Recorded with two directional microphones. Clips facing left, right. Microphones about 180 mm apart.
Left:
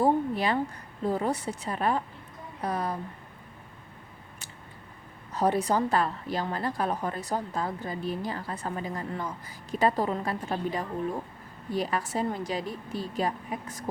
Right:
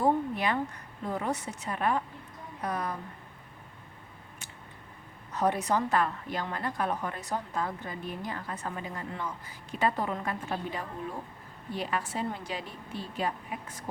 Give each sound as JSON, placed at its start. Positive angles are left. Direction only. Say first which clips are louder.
{"t": 0.0, "sound": "a woman's voice", "louder": "left 2 dB", "side_deg": 35}
{"t": 5.3, "sound": "a woman's voice", "louder": "left 2 dB", "side_deg": 30}